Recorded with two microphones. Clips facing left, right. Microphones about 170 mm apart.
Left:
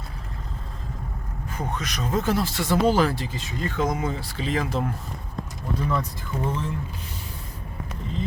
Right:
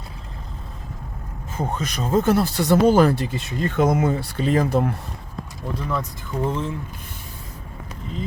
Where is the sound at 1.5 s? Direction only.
30° right (ahead or behind).